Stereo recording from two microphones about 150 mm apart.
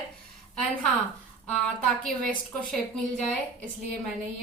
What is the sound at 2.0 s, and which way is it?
Speech, 5° left (ahead or behind).